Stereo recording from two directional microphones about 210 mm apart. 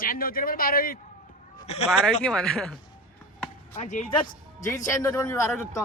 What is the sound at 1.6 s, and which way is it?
Speech, 30° left (ahead or behind).